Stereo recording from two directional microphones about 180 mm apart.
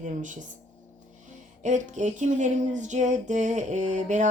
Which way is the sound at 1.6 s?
45° right (ahead or behind).